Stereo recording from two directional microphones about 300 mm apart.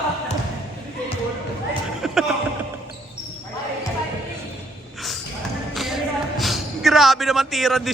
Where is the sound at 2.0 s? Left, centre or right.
Centre.